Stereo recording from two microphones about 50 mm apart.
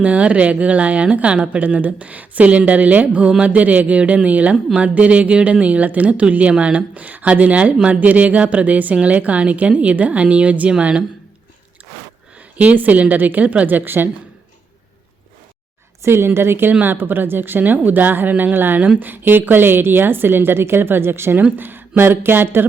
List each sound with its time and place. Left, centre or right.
0.0 s a woman's voice: right
12.5 s speech: right
13.7 s a woman's voice: right
16.0 s a woman's voice: right